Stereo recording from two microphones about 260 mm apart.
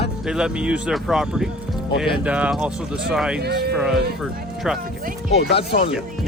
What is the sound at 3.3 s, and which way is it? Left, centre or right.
Speech, right.